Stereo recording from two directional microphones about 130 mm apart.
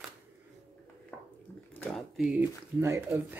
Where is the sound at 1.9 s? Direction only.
5° right (ahead or behind).